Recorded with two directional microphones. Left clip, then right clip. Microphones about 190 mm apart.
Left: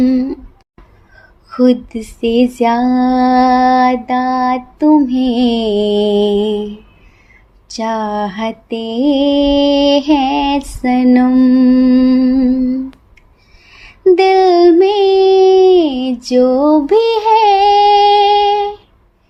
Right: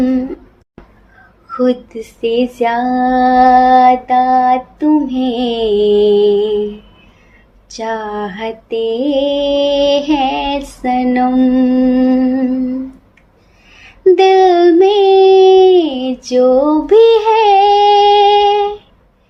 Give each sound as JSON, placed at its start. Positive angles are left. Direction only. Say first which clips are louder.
{"t": 1.5, "sound": "female singing", "louder": "left 2 dB", "side_deg": 45}
{"t": 7.8, "sound": "female singing", "louder": "left 2 dB", "side_deg": 50}
{"t": 13.7, "sound": "a sound", "louder": "left 1 dB", "side_deg": 45}
{"t": 14.2, "sound": "child singing", "louder": "right 1 dB", "side_deg": 45}
{"t": 14.8, "sound": "female singing", "louder": "right 2 dB", "side_deg": 45}